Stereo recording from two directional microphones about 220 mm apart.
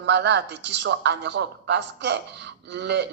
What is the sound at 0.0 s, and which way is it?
Speech, 50° right (ahead or behind).